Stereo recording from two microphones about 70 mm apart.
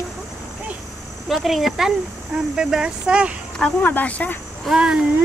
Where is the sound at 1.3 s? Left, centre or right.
Centre.